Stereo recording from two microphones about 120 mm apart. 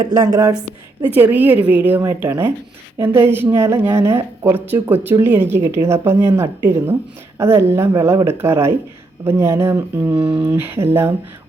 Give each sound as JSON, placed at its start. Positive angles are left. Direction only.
{"t": 0.0, "sound": "speech", "side_deg": -35}
{"t": 1.1, "sound": "a woman's voice", "side_deg": -15}
{"t": 10.2, "sound": "speech", "side_deg": -45}
{"t": 10.4, "sound": "a woman's voice", "side_deg": -20}